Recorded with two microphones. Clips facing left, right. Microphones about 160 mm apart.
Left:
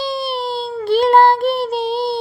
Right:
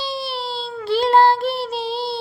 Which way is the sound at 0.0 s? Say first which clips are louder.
Left 5 dB; 55° left (ahead or behind).